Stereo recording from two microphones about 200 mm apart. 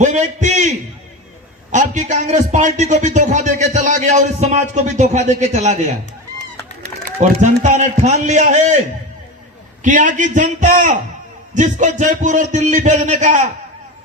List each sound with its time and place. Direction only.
0.0 s a sound: 35° right (ahead or behind)
1.7 s a man's voice: 35° right (ahead or behind)
7.0 s a man's voice: 35° right (ahead or behind)
9.8 s a man's voice: 40° right (ahead or behind)